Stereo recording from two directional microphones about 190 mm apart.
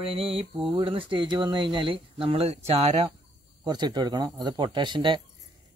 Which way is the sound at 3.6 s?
20° right (ahead or behind).